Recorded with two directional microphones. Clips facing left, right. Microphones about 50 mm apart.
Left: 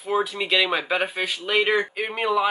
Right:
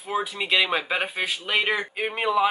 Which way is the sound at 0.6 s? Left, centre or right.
Centre.